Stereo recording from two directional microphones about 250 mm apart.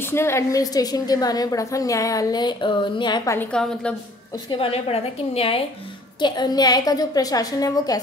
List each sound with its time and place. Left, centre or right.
0.0 s a woman's voice: centre
4.5 s a woman's voice: left